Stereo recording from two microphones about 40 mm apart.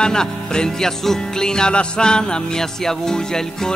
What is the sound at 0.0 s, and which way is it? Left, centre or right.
Music, centre.